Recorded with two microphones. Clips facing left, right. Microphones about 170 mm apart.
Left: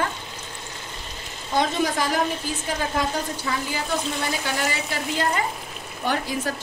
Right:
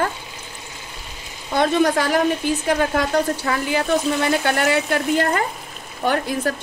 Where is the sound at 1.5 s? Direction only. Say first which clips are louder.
Right 6 dB; 65° right (ahead or behind).